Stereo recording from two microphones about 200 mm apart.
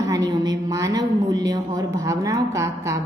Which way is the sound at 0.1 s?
15° right (ahead or behind).